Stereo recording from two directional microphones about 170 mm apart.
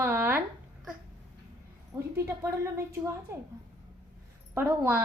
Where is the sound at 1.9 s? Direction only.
15° right (ahead or behind).